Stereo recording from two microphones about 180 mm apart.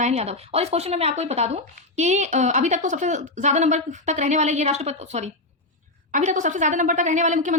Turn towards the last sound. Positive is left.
turn(degrees=-45)  # may be behind; listen again after turning